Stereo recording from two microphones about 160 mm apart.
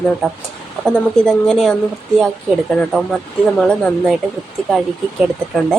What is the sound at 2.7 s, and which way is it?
A woman's voice, 5° left (ahead or behind).